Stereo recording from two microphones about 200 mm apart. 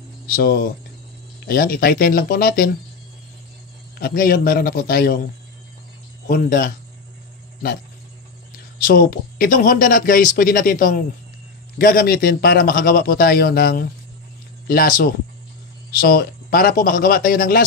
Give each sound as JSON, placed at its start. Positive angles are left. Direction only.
{"t": 0.3, "sound": "speech", "side_deg": 50}
{"t": 4.0, "sound": "speech", "side_deg": 45}
{"t": 8.8, "sound": "speech", "side_deg": 45}